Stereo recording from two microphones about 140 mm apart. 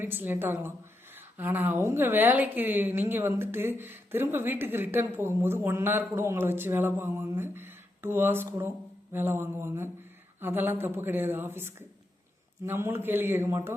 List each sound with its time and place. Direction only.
0.0 s a woman's voice: 15° right (ahead or behind)